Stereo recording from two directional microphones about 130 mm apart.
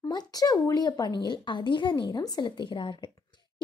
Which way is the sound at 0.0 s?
30° left (ahead or behind).